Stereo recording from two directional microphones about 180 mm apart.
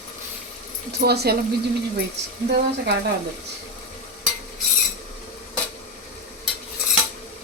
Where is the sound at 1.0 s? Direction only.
60° right (ahead or behind).